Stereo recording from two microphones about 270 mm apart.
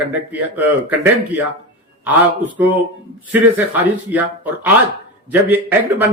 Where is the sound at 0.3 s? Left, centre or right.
Centre.